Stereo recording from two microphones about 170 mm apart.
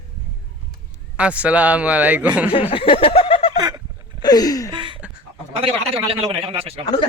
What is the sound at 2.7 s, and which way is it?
Snicker, 35° left (ahead or behind).